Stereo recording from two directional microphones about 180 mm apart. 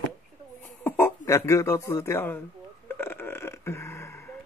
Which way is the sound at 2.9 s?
10° left (ahead or behind).